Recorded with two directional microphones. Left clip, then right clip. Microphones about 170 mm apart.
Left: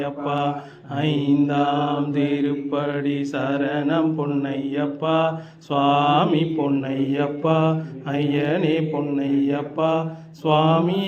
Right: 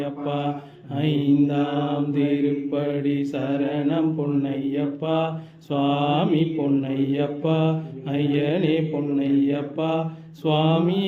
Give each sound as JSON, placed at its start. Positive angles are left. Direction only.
{"t": 0.0, "sound": "mantra", "side_deg": -25}